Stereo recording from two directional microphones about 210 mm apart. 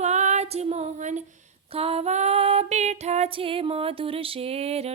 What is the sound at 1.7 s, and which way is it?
Female singing, 30° right (ahead or behind).